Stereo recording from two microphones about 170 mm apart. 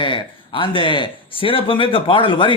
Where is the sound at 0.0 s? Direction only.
30° left (ahead or behind).